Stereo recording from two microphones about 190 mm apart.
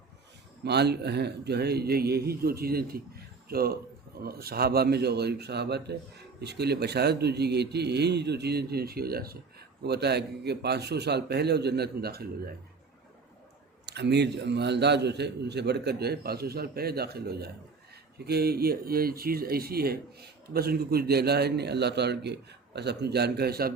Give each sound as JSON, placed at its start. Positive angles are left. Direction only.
{"t": 0.6, "sound": "a man's voice", "side_deg": -60}
{"t": 13.8, "sound": "speech", "side_deg": -60}